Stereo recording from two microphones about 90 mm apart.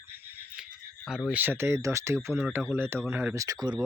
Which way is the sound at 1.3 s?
20° right (ahead or behind).